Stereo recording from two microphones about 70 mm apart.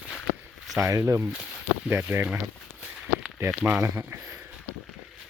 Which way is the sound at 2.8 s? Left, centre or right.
Centre.